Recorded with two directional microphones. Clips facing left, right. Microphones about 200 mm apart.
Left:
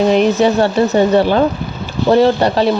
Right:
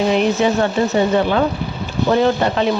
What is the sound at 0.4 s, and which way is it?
A woman's voice, 35° left (ahead or behind).